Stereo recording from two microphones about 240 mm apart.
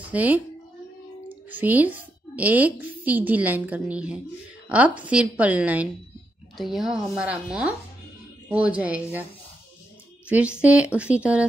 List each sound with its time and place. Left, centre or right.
0.1 s speech: centre
1.5 s a woman's voice: centre
10.2 s a woman's voice: centre